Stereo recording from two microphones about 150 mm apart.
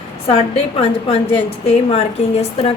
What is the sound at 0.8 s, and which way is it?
A woman's voice, 40° left (ahead or behind).